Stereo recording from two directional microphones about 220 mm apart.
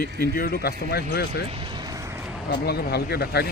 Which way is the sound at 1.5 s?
20° right (ahead or behind).